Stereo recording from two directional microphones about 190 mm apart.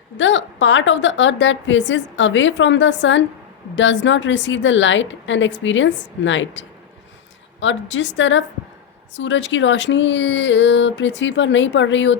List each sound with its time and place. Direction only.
0.2 s a woman's voice: 75° left (ahead or behind)